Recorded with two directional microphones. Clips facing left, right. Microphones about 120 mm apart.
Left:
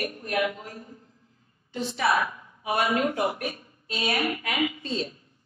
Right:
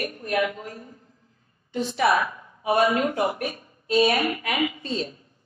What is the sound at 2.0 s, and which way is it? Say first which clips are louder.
A woman's voice: right 3 dB; 30° right (ahead or behind).